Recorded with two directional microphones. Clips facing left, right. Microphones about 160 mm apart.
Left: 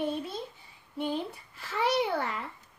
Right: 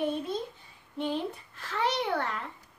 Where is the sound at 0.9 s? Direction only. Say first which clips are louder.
Right 1 dB; 10° left (ahead or behind).